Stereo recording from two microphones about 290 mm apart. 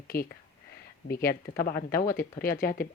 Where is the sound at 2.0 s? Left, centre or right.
Left.